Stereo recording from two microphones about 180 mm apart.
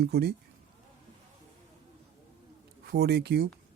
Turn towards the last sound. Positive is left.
turn(degrees=-65)  # may be behind; listen again after turning